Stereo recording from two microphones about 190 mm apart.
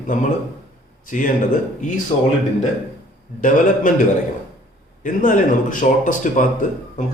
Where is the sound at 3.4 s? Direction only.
45° left (ahead or behind).